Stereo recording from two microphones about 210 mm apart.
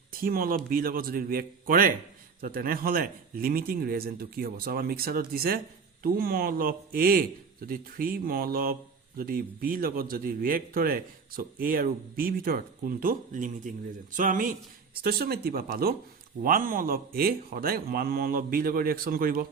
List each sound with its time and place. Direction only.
0.1 s a man's voice: 45° right (ahead or behind)